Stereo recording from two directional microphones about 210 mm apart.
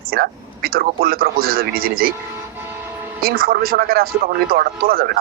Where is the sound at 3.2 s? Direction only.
45° right (ahead or behind).